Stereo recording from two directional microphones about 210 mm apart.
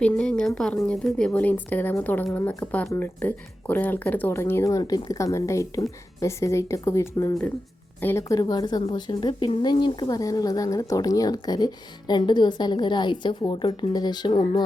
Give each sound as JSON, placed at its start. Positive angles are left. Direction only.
{"t": 0.0, "sound": "speech", "side_deg": 5}